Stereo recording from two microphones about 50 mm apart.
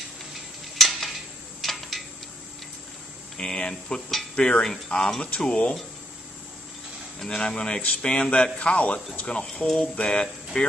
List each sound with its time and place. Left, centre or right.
0.7 s a sound: centre
3.3 s speech: centre
7.2 s speech: centre